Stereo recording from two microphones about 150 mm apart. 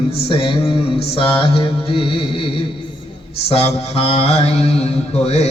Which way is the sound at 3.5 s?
40° left (ahead or behind).